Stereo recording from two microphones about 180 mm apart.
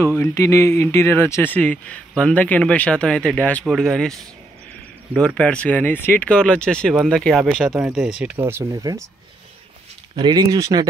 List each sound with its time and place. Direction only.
0.0 s speech: 15° left (ahead or behind); by 9.0 s 15° right (ahead or behind)
10.1 s speech: 25° right (ahead or behind)